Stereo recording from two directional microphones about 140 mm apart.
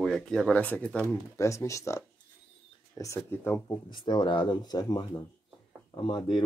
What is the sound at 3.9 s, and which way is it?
Speech, 35° left (ahead or behind).